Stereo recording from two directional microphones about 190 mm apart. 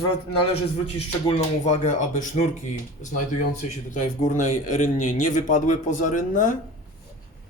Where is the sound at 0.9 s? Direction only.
35° left (ahead or behind).